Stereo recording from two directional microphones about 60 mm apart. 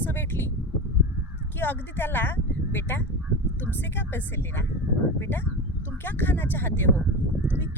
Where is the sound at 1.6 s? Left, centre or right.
Left.